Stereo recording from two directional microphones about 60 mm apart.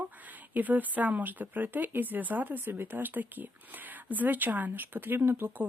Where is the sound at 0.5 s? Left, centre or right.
Right.